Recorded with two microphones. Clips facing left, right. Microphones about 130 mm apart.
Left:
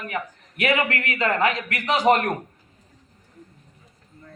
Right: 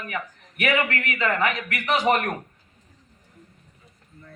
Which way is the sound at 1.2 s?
35° left (ahead or behind).